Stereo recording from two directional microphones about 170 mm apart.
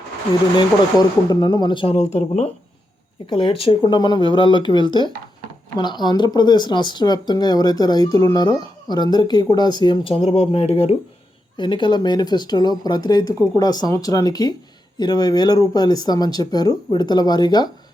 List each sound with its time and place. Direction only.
0.5 s speech: 25° left (ahead or behind); by 2.5 s 40° left (ahead or behind)
3.2 s speech: 30° left (ahead or behind)